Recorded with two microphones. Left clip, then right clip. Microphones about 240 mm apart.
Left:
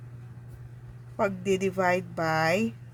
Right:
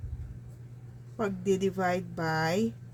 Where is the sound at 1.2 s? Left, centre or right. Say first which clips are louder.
Left 2 dB; left.